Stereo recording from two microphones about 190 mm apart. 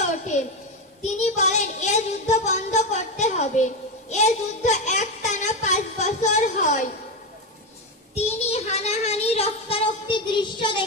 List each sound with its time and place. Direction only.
1.0 s speech: 40° left (ahead or behind)
4.1 s a sound: 40° left (ahead or behind)
8.1 s speech: 35° left (ahead or behind)